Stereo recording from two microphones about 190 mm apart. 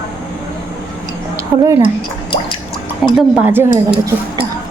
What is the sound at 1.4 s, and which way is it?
Speech, 15° right (ahead or behind).